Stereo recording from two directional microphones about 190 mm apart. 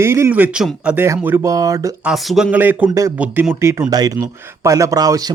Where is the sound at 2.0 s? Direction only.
Centre (ahead or behind).